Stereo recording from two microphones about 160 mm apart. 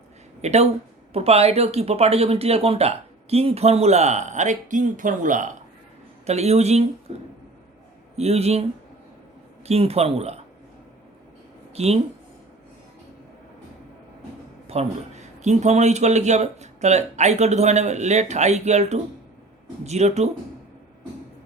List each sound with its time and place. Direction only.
0.4 s a man's voice: 45° right (ahead or behind)
6.2 s speech: 40° right (ahead or behind)
8.1 s speech: 40° right (ahead or behind)
9.6 s speech: 40° right (ahead or behind)
11.7 s speech: 40° right (ahead or behind)
14.7 s a man's voice: 45° right (ahead or behind)